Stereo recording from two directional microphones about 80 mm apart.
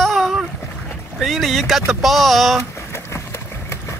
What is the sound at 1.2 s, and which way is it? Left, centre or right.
Speech, centre.